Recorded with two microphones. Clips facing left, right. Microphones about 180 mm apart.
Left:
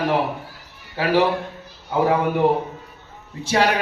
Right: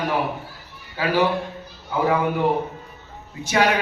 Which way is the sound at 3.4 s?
30° left (ahead or behind).